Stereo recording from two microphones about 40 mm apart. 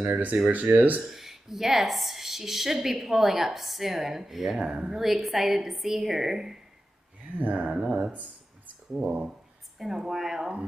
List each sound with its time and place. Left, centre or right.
0.1 s speech: right
1.0 s a woman's voice: centre
4.6 s speech: right
4.9 s a woman's voice: centre
7.7 s a woman's voice: centre